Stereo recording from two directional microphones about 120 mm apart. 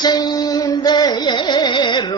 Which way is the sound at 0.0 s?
35° left (ahead or behind).